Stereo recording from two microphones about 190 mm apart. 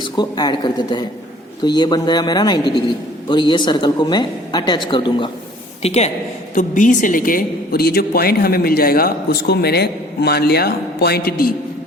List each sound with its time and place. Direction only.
0.0 s a woman's voice: 20° left (ahead or behind)
5.8 s a woman's voice: 35° left (ahead or behind); by 11.5 s 50° left (ahead or behind)